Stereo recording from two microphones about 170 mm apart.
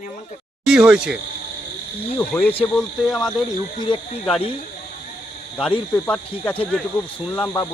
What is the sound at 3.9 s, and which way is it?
Speech, 30° left (ahead or behind).